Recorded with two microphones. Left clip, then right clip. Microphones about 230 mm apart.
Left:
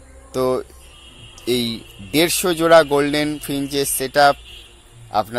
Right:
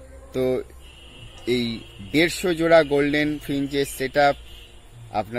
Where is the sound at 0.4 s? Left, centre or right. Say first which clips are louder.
Left 4 dB; left.